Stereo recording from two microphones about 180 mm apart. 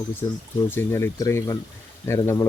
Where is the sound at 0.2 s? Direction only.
20° left (ahead or behind).